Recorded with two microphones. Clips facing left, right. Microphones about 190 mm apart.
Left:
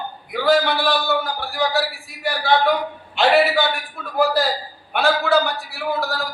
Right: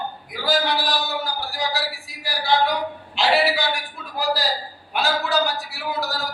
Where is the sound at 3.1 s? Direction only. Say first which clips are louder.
Left 4 dB; 55° left (ahead or behind).